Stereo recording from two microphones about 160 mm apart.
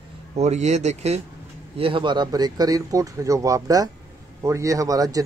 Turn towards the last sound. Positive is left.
turn(degrees=-20)  # may be behind; listen again after turning